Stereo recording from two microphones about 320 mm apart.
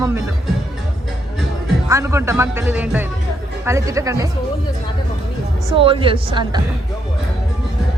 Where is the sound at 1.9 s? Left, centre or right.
Centre.